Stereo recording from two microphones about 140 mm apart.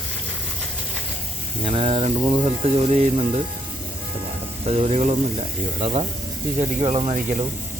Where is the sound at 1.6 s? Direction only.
40° right (ahead or behind).